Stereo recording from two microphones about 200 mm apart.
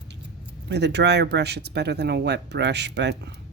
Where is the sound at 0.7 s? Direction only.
55° right (ahead or behind).